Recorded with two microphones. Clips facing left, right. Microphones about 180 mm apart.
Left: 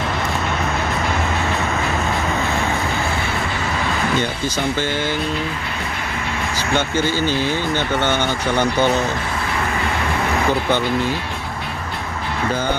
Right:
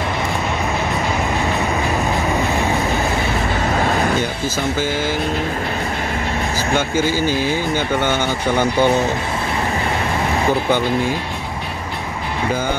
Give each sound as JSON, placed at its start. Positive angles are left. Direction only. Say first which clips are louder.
{"t": 4.7, "sound": "speech", "louder": "right 1 dB", "side_deg": -5}
{"t": 6.7, "sound": "speech", "louder": "right 1 dB", "side_deg": -10}